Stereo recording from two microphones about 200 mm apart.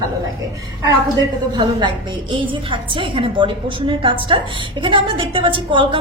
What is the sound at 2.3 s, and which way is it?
A woman's voice, 25° right (ahead or behind).